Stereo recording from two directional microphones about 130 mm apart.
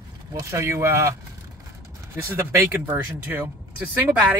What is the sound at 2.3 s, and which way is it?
Speech, 15° right (ahead or behind).